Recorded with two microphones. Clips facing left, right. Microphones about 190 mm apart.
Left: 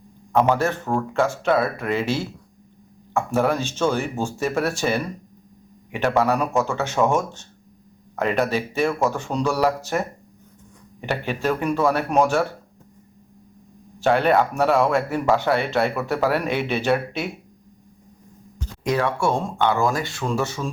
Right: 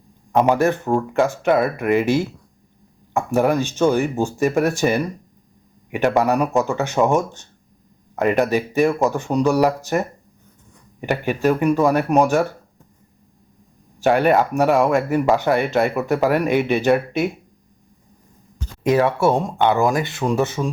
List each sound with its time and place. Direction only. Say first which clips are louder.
0.3 s speech: right 3 dB; 15° right (ahead or behind)
11.0 s speech: right 5 dB; 10° right (ahead or behind)
14.0 s speech: right 2 dB; 10° right (ahead or behind)
18.9 s speech: right 5 dB; 20° right (ahead or behind)